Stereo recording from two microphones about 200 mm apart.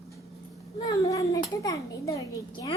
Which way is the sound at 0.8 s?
15° left (ahead or behind).